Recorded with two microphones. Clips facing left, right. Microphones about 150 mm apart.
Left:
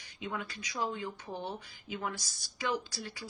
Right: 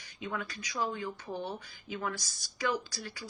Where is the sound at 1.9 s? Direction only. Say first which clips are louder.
Right 1 dB; 20° left (ahead or behind).